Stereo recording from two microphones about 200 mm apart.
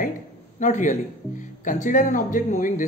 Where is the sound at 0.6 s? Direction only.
40° left (ahead or behind).